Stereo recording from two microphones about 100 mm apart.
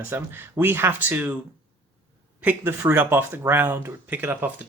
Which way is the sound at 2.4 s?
20° right (ahead or behind).